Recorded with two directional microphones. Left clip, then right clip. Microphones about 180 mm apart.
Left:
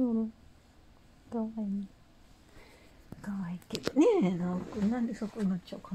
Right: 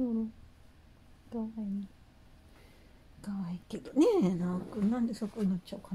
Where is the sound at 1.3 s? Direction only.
15° left (ahead or behind).